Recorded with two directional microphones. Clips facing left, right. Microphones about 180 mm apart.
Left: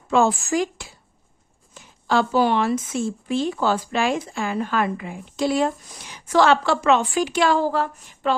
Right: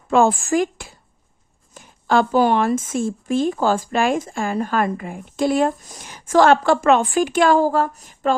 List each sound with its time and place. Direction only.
0.1 s speech: 50° right (ahead or behind)